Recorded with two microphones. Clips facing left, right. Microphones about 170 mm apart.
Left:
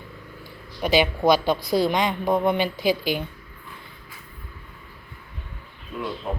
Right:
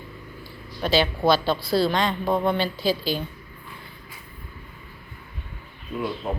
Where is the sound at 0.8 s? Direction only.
15° left (ahead or behind).